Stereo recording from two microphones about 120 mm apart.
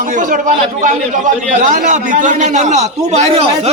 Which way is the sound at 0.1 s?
90° right.